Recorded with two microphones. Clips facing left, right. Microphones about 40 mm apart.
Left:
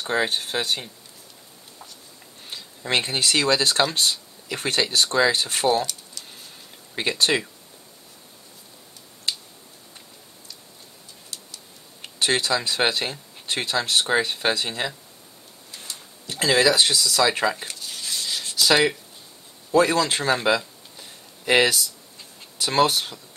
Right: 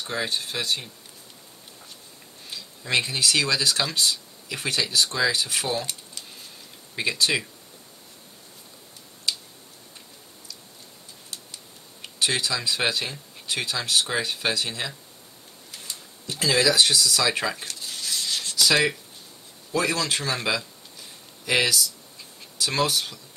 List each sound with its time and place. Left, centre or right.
0.0 s speech: left
2.5 s speech: left
7.0 s speech: left
12.2 s speech: left
16.3 s speech: left
19.7 s speech: left
20.4 s a sound: left
21.5 s speech: left